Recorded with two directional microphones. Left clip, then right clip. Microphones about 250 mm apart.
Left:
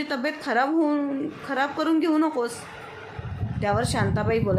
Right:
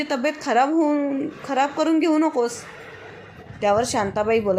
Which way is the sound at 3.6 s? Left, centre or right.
Centre.